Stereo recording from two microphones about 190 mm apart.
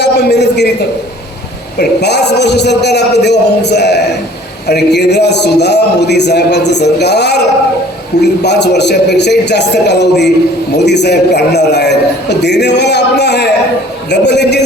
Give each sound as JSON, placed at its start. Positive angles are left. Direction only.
{"t": 0.0, "sound": "a man's voice", "side_deg": 65}
{"t": 1.8, "sound": "a man's voice", "side_deg": 60}